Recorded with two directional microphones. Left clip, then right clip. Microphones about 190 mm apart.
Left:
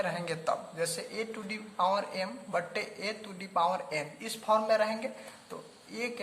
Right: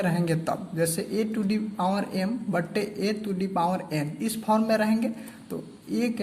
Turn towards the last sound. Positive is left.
turn(degrees=-20)  # may be behind; listen again after turning